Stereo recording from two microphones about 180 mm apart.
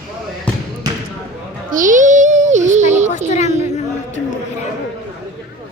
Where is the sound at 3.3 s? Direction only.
40° left (ahead or behind).